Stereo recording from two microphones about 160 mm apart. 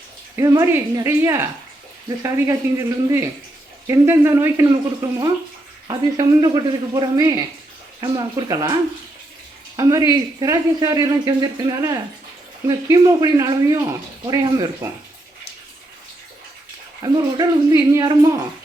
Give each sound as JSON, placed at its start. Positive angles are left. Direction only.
{"t": 0.3, "sound": "speech", "side_deg": -20}
{"t": 17.0, "sound": "speech", "side_deg": -25}